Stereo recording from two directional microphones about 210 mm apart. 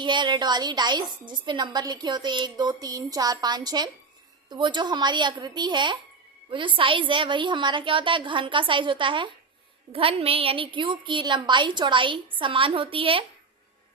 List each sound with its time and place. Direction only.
0.0 s a woman's voice: 20° right (ahead or behind)